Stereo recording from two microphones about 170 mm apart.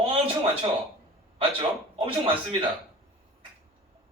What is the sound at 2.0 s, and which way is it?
Speech, 30° right (ahead or behind).